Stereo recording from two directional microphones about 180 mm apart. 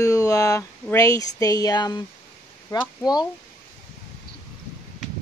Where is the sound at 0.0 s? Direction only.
20° left (ahead or behind).